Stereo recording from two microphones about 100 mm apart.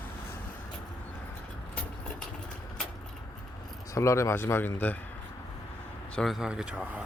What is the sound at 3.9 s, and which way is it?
Speech, 30° left (ahead or behind).